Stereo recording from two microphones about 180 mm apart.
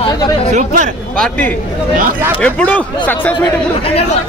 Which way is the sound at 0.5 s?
45° right (ahead or behind).